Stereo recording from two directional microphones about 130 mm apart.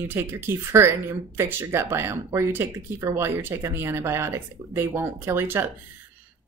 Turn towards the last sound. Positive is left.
turn(degrees=-15)  # may be behind; listen again after turning